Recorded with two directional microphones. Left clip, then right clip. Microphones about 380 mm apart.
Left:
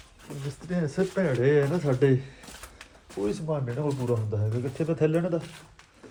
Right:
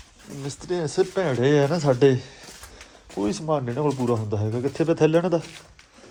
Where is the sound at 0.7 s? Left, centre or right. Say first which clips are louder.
Right 5 dB; centre.